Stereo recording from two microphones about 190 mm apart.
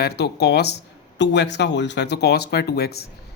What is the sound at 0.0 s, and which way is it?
Speech, 60° left (ahead or behind).